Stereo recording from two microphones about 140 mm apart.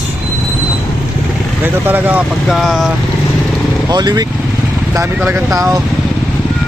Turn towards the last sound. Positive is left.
turn(degrees=-15)  # may be behind; listen again after turning